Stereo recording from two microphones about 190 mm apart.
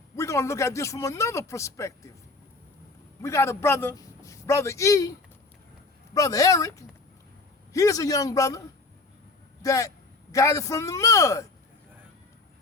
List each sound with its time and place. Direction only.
0.2 s a man's voice: 15° left (ahead or behind)
3.2 s a man's voice: 15° left (ahead or behind)
6.1 s a man's voice: 20° left (ahead or behind)